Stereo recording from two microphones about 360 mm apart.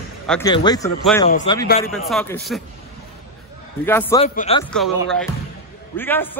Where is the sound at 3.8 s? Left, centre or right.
Centre.